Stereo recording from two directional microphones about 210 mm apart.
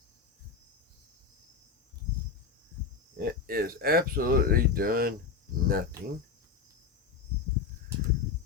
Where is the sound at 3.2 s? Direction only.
45° right (ahead or behind).